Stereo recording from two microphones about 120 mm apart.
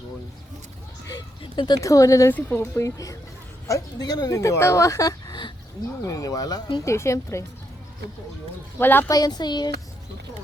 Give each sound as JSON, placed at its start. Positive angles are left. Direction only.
{"t": 1.4, "sound": "speech", "side_deg": 40}
{"t": 1.8, "sound": "speech", "side_deg": 25}
{"t": 6.8, "sound": "speech", "side_deg": 25}
{"t": 8.8, "sound": "a woman's voice", "side_deg": 15}
{"t": 9.0, "sound": "speech", "side_deg": 35}